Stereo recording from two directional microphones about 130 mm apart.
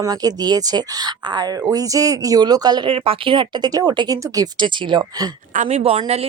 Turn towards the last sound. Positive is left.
turn(degrees=-50)  # may be behind; listen again after turning